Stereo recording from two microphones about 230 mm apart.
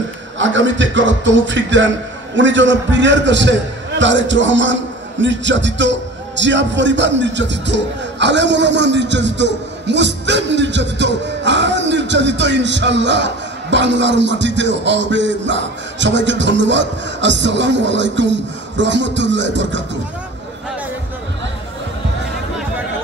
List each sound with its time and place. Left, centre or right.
0.4 s a man's voice: right